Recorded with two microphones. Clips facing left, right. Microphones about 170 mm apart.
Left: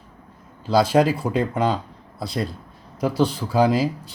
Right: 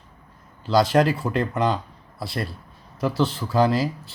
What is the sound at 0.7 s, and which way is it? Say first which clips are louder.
Speech: left 1 dB; 10° left (ahead or behind).